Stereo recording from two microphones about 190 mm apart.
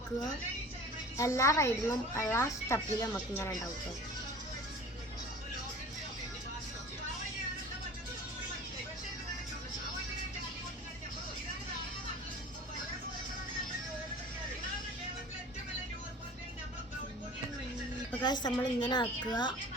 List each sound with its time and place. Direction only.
1.1 s speech: 15° left (ahead or behind)
18.2 s a woman's voice: 20° left (ahead or behind)